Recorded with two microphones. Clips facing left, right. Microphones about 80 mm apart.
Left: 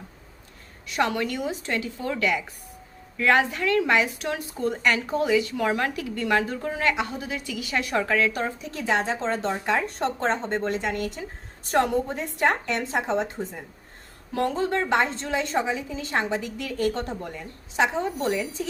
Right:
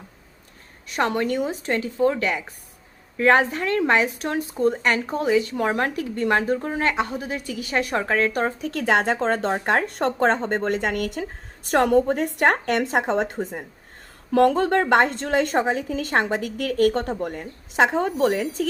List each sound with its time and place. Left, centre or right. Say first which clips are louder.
0.9 s a woman's voice: right 2 dB; right
14.3 s a woman's voice: right 7 dB; right